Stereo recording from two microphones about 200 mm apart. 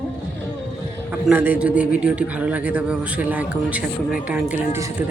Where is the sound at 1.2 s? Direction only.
10° right (ahead or behind).